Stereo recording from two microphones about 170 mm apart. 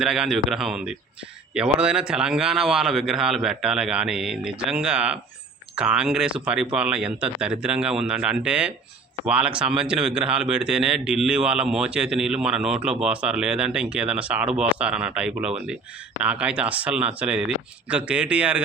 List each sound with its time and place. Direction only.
0.0 s speech: 5° right (ahead or behind)